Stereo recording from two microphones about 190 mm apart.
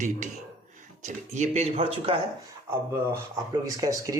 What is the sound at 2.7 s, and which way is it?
Speech, 15° right (ahead or behind).